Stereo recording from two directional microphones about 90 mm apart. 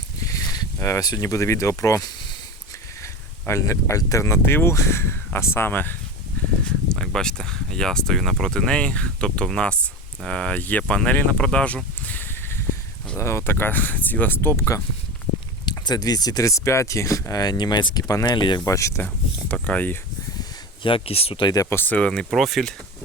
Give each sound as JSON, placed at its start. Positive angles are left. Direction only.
{"t": 0.2, "sound": "a sound", "side_deg": 40}
{"t": 0.8, "sound": "speech", "side_deg": 35}
{"t": 6.7, "sound": "speech", "side_deg": 5}
{"t": 12.0, "sound": "a sound", "side_deg": 20}
{"t": 13.1, "sound": "speech", "side_deg": 30}
{"t": 15.8, "sound": "speech", "side_deg": 50}
{"t": 18.3, "sound": "speech", "side_deg": 60}
{"t": 18.6, "sound": "speech", "side_deg": 35}
{"t": 19.6, "sound": "speech", "side_deg": 20}
{"t": 20.8, "sound": "speech", "side_deg": 85}
{"t": 21.5, "sound": "speech", "side_deg": 35}
{"t": 21.8, "sound": "speech", "side_deg": 15}
{"t": 22.3, "sound": "speech", "side_deg": 0}